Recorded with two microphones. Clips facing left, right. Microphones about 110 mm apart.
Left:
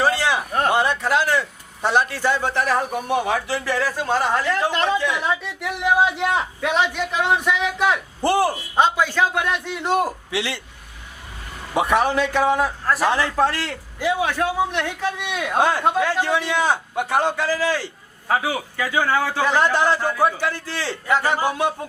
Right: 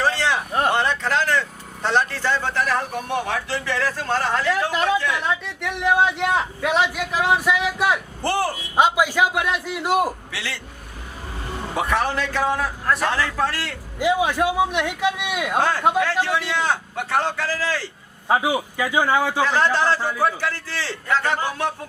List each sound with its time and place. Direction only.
0.0 s a sound: 10° left (ahead or behind)
0.7 s a man's voice: 10° left (ahead or behind)
4.7 s a man's voice: 5° right (ahead or behind)
4.9 s a man's voice: 10° left (ahead or behind)
8.2 s a man's voice: 15° left (ahead or behind)
8.7 s a man's voice: 10° right (ahead or behind)
10.3 s a man's voice: 20° left (ahead or behind)
11.7 s a man's voice: 15° left (ahead or behind)
12.8 s a man's voice: 5° left (ahead or behind)
13.1 s a man's voice: 20° left (ahead or behind)
14.0 s a man's voice: 15° right (ahead or behind)
15.5 s a man's voice: 15° left (ahead or behind)
18.3 s a man's voice: 15° right (ahead or behind)
19.5 s a man's voice: 15° left (ahead or behind)